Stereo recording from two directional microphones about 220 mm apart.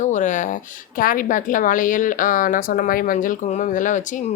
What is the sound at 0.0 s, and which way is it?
A woman's voice, 35° left (ahead or behind).